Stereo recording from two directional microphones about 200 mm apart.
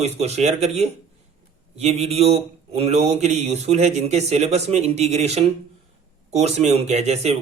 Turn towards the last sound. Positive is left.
turn(degrees=-35)  # may be behind; listen again after turning